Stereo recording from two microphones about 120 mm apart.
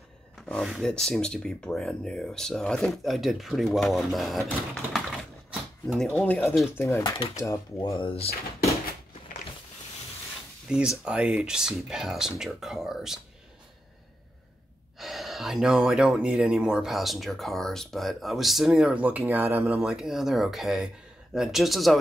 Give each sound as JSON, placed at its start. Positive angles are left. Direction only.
{"t": 0.4, "sound": "speech", "side_deg": 0}
{"t": 4.7, "sound": "typewriter", "side_deg": 0}
{"t": 6.0, "sound": "speech", "side_deg": 10}
{"t": 8.0, "sound": "speech", "side_deg": 50}
{"t": 10.7, "sound": "speech", "side_deg": -5}
{"t": 15.0, "sound": "speech", "side_deg": 0}
{"t": 19.7, "sound": "speech", "side_deg": -5}